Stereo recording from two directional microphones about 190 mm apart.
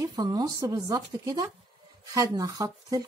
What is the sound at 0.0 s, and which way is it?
A woman's voice, 20° right (ahead or behind).